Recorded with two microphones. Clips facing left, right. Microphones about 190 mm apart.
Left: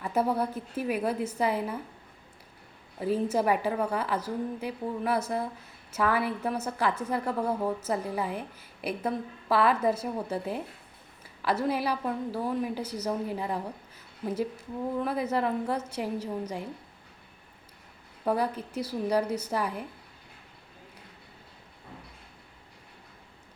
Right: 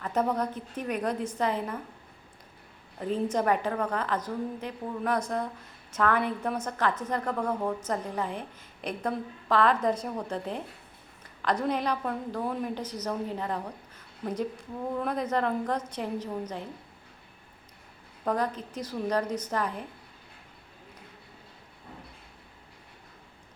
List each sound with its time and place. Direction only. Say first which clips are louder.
0.0 s a woman's voice: left 1 dB; 10° left (ahead or behind)
3.0 s a woman's voice: left 1 dB; 5° left (ahead or behind)
18.3 s a woman's voice: left 1 dB; 10° left (ahead or behind)